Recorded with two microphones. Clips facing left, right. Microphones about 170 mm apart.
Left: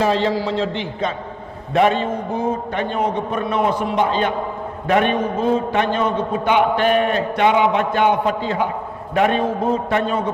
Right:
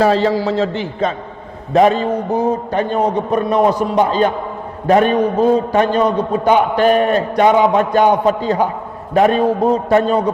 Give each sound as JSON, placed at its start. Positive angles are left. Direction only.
{"t": 0.0, "sound": "a man's voice", "side_deg": -40}